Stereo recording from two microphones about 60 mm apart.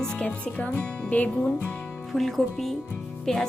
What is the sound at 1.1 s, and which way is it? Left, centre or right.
Speech, left.